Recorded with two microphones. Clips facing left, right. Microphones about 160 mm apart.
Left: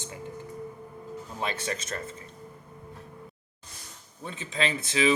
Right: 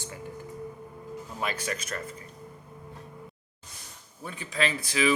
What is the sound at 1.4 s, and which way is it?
Speech, 25° left (ahead or behind).